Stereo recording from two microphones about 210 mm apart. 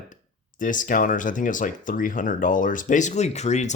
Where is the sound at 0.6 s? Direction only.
40° left (ahead or behind).